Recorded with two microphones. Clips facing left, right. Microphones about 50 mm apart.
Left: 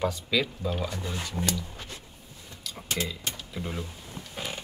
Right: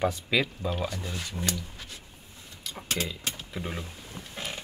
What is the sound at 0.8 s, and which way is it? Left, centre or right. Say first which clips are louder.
Speech: left 1 dB; left.